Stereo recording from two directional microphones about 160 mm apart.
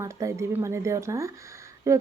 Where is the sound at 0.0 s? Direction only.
20° right (ahead or behind).